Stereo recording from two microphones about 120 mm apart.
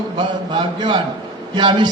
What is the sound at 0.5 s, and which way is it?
A man's voice, 40° right (ahead or behind).